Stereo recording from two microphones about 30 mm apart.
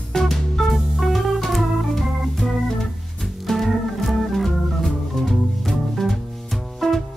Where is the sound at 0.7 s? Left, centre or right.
Centre.